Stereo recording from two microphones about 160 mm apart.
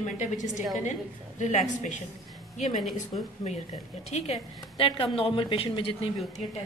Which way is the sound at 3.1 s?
45° left (ahead or behind).